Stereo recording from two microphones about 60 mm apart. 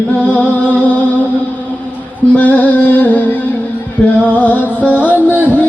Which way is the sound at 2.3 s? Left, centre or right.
Left.